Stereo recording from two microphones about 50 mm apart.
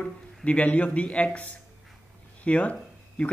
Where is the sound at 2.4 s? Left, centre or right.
Left.